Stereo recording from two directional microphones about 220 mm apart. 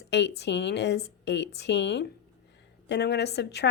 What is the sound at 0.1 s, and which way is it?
A woman's voice, 50° left (ahead or behind).